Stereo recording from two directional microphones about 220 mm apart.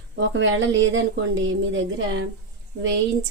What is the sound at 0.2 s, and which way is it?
A woman's voice, 60° right (ahead or behind).